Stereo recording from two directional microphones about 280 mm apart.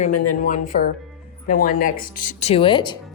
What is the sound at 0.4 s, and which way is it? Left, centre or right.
Speech, left.